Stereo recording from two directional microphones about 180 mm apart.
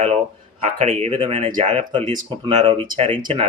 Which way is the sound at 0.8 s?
35° right (ahead or behind).